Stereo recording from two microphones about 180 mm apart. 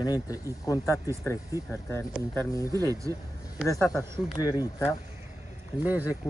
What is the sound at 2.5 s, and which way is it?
Speech, 20° left (ahead or behind).